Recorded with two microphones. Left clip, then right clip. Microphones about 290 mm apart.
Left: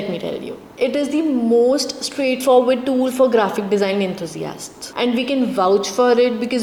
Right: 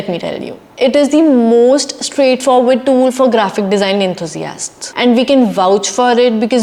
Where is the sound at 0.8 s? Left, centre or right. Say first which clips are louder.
Right 9 dB; right.